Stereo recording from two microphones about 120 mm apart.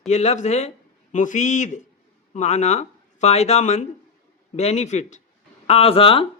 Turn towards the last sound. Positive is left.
turn(degrees=50)  # may be behind; listen again after turning